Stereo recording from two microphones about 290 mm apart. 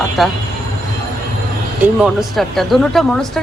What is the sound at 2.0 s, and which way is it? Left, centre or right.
Speech, centre.